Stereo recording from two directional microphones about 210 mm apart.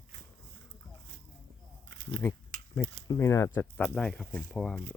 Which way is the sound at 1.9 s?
60° right (ahead or behind).